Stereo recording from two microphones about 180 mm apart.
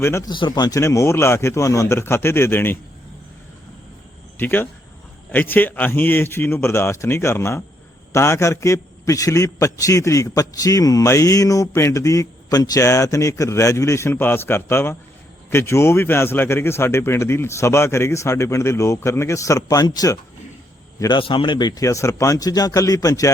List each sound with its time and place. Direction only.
0.0 s a man's voice: 15° left (ahead or behind)
4.4 s a man's voice: 10° left (ahead or behind)